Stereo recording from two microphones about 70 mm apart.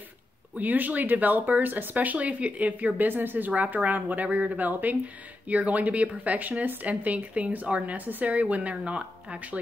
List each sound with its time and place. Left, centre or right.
0.6 s speech: right